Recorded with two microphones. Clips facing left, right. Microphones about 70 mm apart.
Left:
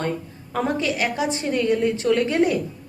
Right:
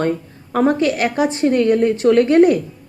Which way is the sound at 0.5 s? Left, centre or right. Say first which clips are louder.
Right 7 dB; right.